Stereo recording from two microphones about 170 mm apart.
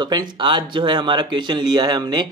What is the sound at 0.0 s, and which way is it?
Speech, 25° right (ahead or behind).